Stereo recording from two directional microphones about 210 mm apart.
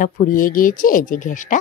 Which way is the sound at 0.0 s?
40° left (ahead or behind).